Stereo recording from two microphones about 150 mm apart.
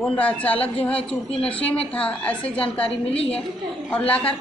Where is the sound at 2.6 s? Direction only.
40° left (ahead or behind).